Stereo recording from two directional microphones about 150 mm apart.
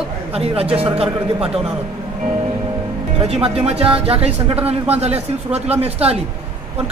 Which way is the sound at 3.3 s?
40° right (ahead or behind).